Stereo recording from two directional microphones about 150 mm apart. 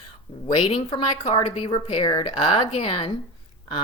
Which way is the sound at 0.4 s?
45° left (ahead or behind).